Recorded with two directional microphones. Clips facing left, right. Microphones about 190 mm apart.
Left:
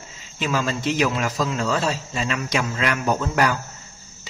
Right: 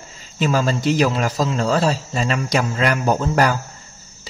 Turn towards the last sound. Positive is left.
turn(degrees=-35)  # may be behind; listen again after turning